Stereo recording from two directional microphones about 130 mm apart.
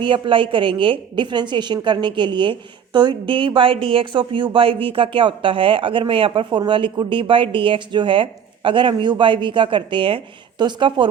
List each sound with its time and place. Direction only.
0.0 s a woman's voice: 40° right (ahead or behind)